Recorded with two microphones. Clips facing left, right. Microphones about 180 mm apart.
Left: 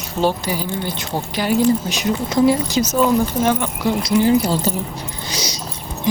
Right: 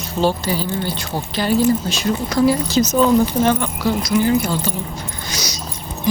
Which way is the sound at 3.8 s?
25° left (ahead or behind).